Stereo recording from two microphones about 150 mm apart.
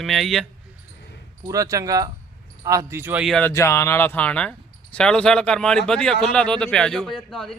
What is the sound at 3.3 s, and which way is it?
Speech, 5° left (ahead or behind).